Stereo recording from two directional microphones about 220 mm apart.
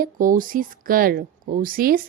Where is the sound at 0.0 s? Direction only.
40° right (ahead or behind).